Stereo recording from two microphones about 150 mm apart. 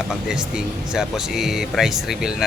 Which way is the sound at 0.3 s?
5° right (ahead or behind).